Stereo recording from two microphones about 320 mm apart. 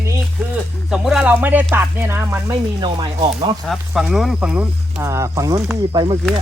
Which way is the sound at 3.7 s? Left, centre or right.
Centre.